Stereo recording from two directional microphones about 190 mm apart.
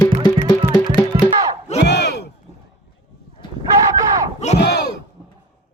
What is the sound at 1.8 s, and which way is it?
Battle cry, 60° left (ahead or behind).